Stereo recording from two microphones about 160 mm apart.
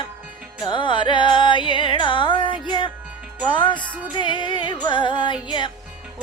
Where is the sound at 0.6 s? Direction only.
30° left (ahead or behind).